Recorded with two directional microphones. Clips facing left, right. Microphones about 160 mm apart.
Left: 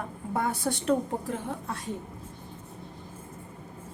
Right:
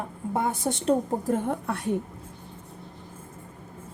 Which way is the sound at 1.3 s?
60° right (ahead or behind).